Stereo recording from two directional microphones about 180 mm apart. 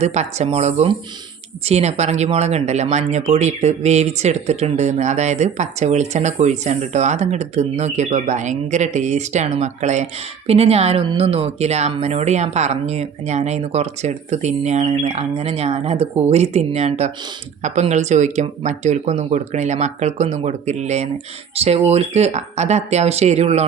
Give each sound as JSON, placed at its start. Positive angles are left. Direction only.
{"t": 0.0, "sound": "speech", "side_deg": -40}